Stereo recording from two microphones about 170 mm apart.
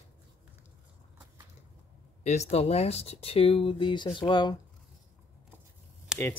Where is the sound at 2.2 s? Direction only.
40° left (ahead or behind).